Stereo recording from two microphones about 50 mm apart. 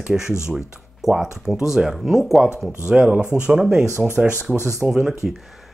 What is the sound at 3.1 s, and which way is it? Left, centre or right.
Speech, right.